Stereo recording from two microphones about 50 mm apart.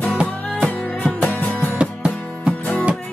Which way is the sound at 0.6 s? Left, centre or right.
Left.